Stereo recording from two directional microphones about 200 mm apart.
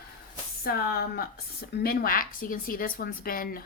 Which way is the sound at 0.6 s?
50° left (ahead or behind).